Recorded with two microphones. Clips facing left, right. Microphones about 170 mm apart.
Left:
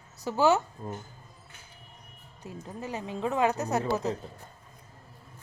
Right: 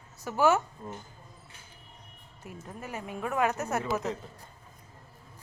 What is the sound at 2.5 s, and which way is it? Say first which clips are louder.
A woman's voice: left 3 dB; 20° left (ahead or behind).